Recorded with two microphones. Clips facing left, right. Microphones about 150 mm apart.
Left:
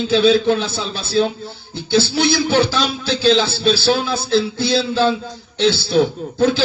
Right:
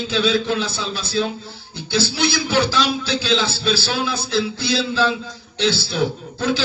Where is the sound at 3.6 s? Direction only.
50° left (ahead or behind).